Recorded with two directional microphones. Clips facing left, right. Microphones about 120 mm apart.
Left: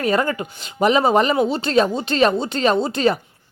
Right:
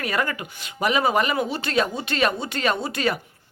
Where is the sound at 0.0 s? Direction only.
30° left (ahead or behind).